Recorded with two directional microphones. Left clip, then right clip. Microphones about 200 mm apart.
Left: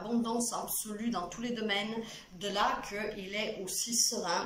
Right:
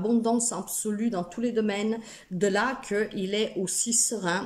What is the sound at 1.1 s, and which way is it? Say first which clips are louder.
Speech: right 7 dB; 45° right (ahead or behind).